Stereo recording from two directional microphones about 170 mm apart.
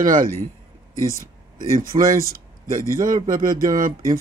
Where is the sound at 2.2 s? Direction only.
55° right (ahead or behind).